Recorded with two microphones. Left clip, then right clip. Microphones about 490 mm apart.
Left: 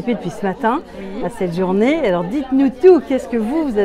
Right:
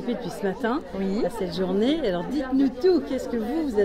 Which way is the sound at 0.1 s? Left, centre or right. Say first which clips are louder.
Left 7 dB; left.